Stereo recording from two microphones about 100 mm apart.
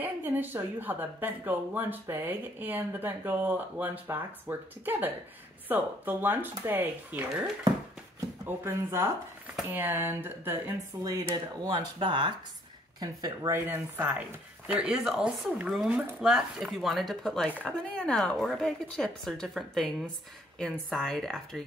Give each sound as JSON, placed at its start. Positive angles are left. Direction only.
{"t": 0.0, "sound": "speech", "side_deg": -20}
{"t": 8.7, "sound": "speech", "side_deg": -25}
{"t": 11.7, "sound": "speech", "side_deg": -55}
{"t": 13.0, "sound": "speech", "side_deg": -40}
{"t": 13.5, "sound": "a woman's voice", "side_deg": -25}